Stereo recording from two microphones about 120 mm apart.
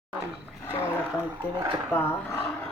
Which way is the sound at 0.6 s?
20° left (ahead or behind).